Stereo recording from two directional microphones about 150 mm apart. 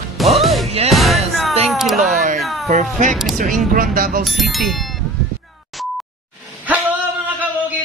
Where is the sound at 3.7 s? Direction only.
70° right (ahead or behind).